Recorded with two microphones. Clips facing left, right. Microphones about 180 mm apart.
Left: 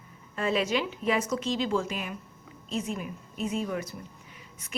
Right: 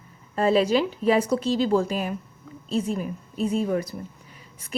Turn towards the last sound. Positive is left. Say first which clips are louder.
# right 7 dB
turn(degrees=-35)  # may be behind; listen again after turning